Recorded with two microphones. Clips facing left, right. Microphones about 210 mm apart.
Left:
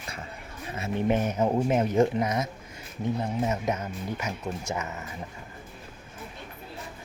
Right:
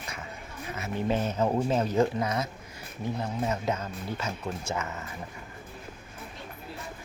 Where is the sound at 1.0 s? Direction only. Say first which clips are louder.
Left 2 dB; 15° left (ahead or behind).